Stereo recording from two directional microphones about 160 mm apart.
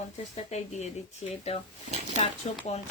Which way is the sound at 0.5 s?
45° left (ahead or behind).